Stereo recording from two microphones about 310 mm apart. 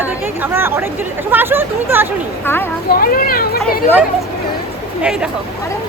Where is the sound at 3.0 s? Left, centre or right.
Left.